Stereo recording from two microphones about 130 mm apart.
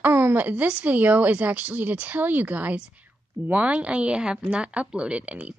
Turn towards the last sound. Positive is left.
turn(degrees=-10)  # may be behind; listen again after turning